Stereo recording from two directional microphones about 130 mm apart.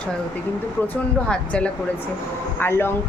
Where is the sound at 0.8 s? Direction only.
10° left (ahead or behind).